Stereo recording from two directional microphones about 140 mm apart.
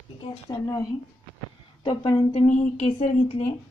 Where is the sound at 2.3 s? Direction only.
55° left (ahead or behind).